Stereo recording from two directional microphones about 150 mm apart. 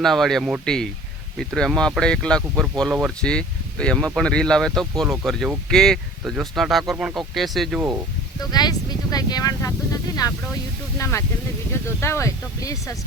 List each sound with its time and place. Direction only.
0.0 s speech: centre (ahead or behind)
8.4 s speech: 25° left (ahead or behind)